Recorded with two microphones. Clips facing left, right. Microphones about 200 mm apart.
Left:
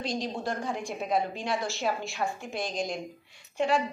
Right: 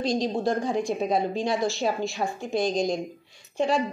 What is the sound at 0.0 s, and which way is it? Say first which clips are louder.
A woman's voice: right 7 dB; 40° right (ahead or behind).